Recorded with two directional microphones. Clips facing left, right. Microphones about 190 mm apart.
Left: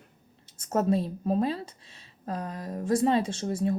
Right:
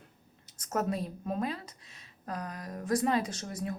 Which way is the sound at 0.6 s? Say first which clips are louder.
Left 6 dB; 30° left (ahead or behind).